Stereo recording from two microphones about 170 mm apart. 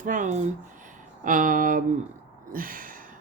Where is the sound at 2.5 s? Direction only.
55° right (ahead or behind).